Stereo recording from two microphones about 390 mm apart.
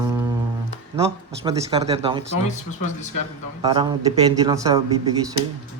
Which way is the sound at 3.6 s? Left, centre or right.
Centre.